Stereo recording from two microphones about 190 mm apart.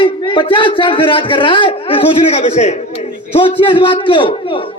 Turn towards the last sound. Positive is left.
turn(degrees=25)  # may be behind; listen again after turning